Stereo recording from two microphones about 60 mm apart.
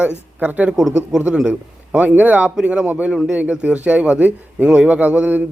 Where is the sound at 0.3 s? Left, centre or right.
Right.